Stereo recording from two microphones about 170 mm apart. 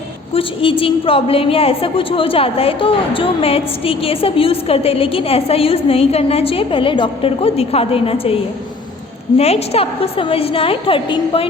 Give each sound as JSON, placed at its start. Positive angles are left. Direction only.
{"t": 0.3, "sound": "a woman's voice", "side_deg": 30}
{"t": 9.4, "sound": "a woman's voice", "side_deg": 35}